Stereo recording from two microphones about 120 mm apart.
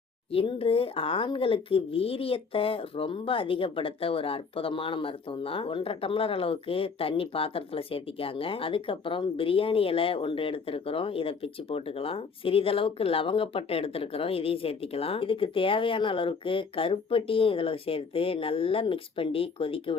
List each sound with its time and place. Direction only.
0.3 s speech: 50° left (ahead or behind)